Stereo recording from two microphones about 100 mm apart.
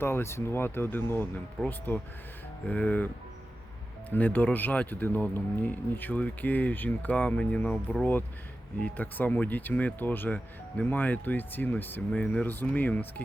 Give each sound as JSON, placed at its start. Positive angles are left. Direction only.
{"t": 0.0, "sound": "speech", "side_deg": 25}
{"t": 1.6, "sound": "speech", "side_deg": 5}
{"t": 2.6, "sound": "speech", "side_deg": 15}
{"t": 4.1, "sound": "speech", "side_deg": 15}